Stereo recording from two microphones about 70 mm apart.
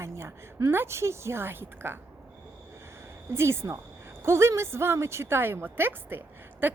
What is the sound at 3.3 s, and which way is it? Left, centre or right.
A woman's voice, right.